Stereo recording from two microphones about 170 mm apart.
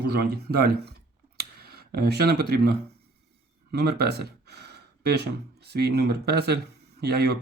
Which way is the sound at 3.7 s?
70° right (ahead or behind).